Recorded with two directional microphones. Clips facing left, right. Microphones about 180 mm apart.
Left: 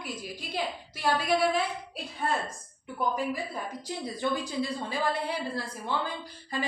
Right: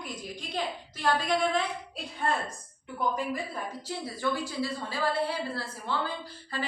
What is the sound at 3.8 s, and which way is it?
A woman's voice, 20° left (ahead or behind).